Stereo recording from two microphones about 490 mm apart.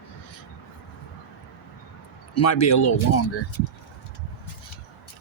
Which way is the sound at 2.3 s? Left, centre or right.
Left.